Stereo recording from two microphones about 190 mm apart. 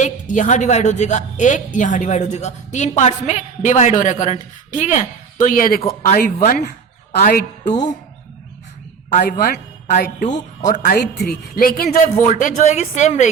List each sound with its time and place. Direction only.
0.0 s a woman's voice: 40° left (ahead or behind)
9.1 s a woman's voice: 45° left (ahead or behind)